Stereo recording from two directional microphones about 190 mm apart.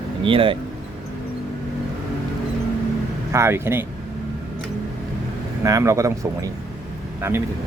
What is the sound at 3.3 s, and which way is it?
Speech, 15° right (ahead or behind).